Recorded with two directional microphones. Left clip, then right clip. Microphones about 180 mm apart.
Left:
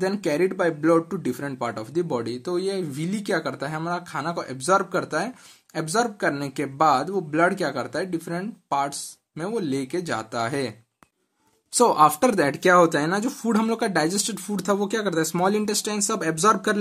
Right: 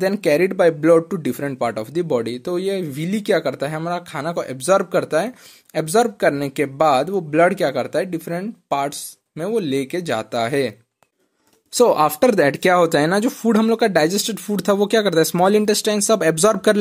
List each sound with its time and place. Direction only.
0.0 s speech: 35° right (ahead or behind)
11.7 s speech: 25° right (ahead or behind)